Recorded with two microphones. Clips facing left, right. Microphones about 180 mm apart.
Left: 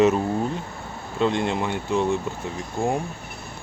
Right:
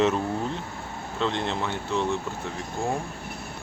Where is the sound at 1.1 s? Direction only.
10° left (ahead or behind).